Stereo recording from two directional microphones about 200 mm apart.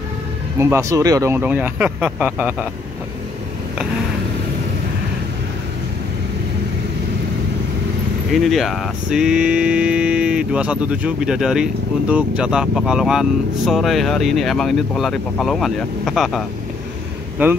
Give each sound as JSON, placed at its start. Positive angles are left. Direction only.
{"t": 0.6, "sound": "speech", "side_deg": -15}
{"t": 8.3, "sound": "a sound", "side_deg": 0}
{"t": 17.4, "sound": "speech", "side_deg": -10}